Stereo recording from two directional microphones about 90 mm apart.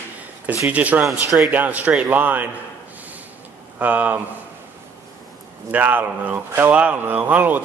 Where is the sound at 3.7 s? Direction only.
20° right (ahead or behind).